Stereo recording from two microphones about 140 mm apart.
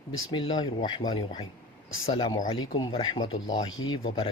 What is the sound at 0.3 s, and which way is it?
Speech, 40° left (ahead or behind).